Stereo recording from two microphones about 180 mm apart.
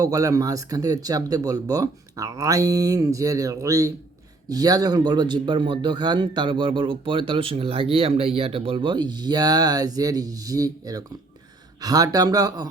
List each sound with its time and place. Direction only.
0.0 s a man's voice: 20° right (ahead or behind)